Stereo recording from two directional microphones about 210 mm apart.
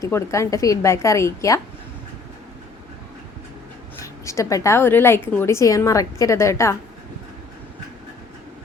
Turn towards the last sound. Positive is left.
turn(degrees=15)  # may be behind; listen again after turning